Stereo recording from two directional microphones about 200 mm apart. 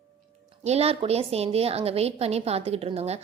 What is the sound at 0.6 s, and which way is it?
A woman's voice, 30° right (ahead or behind).